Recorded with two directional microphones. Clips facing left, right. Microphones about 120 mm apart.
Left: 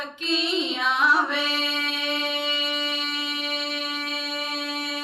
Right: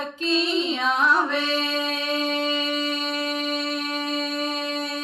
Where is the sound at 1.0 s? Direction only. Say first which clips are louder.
Even; 5° left (ahead or behind).